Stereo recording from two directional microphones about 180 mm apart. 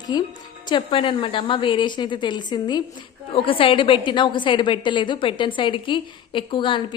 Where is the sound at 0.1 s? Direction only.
25° left (ahead or behind).